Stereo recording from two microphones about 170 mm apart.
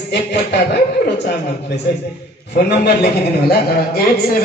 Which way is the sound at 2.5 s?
75° left (ahead or behind).